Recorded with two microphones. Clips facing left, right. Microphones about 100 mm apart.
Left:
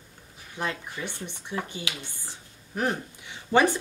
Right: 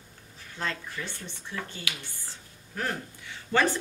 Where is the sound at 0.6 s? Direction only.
15° left (ahead or behind).